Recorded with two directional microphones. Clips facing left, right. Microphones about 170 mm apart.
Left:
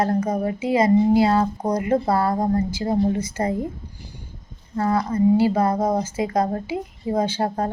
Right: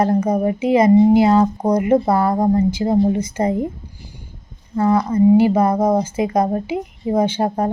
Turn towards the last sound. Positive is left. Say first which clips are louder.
# right 4 dB
turn(degrees=-20)  # may be behind; listen again after turning